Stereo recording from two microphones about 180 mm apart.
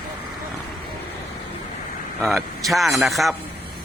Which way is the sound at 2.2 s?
Centre (ahead or behind).